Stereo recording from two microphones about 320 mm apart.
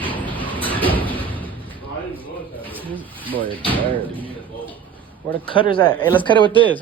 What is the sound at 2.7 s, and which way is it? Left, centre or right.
Speech, centre.